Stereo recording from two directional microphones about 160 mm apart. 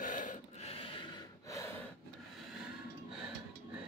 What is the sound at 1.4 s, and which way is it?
Gasp, 20° left (ahead or behind).